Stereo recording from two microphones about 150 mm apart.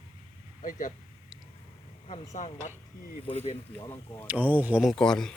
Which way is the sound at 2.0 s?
55° left (ahead or behind).